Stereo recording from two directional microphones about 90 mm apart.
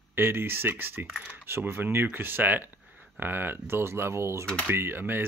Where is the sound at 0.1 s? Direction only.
25° right (ahead or behind).